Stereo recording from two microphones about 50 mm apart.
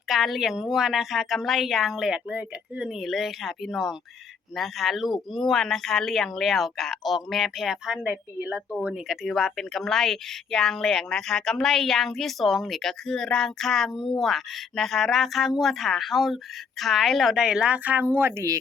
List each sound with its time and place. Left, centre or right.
0.1 s a woman's voice: centre
2.1 s speech: right
2.9 s a woman's voice: centre
8.4 s speech: right
9.0 s a woman's voice: centre
17.3 s speech: centre
17.8 s a woman's voice: right